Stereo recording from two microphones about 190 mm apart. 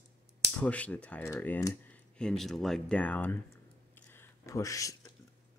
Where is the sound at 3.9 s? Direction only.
10° left (ahead or behind).